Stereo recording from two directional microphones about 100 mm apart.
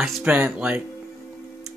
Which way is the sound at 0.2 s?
15° right (ahead or behind).